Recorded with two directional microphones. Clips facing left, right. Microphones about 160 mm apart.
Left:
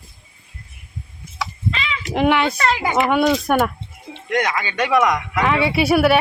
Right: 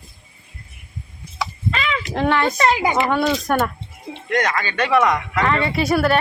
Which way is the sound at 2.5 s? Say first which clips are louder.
Right 2 dB; 25° right (ahead or behind).